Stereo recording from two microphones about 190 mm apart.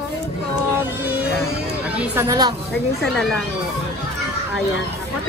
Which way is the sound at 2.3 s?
20° right (ahead or behind).